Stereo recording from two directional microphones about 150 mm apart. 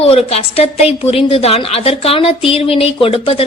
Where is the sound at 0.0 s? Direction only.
40° left (ahead or behind).